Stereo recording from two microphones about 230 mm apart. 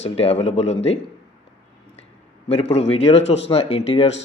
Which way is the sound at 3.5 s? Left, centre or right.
Left.